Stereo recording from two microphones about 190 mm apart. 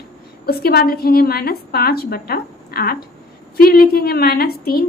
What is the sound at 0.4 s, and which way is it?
A woman's voice, 55° left (ahead or behind).